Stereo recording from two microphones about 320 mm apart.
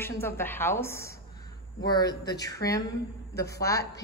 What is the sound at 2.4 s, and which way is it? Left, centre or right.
A woman's voice, centre.